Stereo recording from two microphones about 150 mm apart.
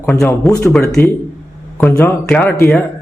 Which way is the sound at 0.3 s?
20° left (ahead or behind).